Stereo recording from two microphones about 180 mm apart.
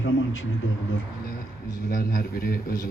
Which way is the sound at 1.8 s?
50° left (ahead or behind).